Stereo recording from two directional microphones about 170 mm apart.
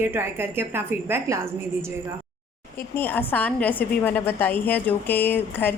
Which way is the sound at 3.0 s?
10° left (ahead or behind).